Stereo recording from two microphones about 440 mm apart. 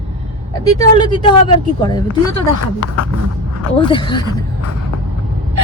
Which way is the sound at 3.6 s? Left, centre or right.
Centre.